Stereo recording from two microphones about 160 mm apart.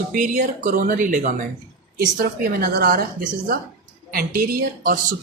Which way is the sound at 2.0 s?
70° right (ahead or behind).